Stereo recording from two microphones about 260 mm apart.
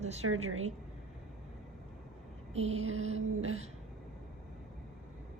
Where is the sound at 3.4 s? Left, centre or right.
Right.